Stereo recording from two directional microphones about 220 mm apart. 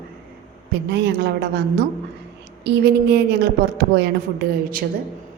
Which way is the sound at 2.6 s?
45° right (ahead or behind).